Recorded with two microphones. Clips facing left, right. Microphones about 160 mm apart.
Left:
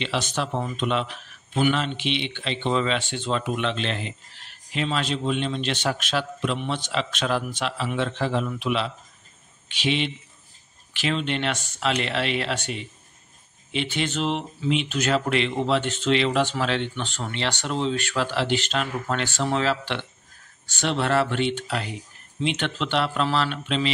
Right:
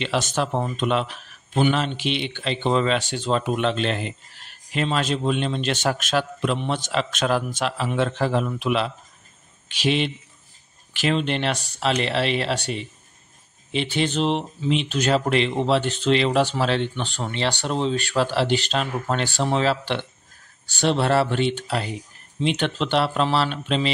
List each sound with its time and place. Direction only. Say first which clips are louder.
0.0 s a man's voice: right 3 dB; 45° right (ahead or behind)